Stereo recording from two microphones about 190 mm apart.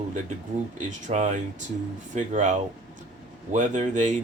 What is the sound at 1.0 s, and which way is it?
Speech, 40° right (ahead or behind).